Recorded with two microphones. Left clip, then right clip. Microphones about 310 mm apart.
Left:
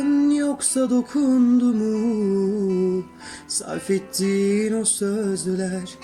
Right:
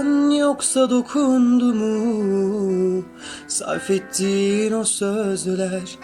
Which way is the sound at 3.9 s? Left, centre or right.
Centre.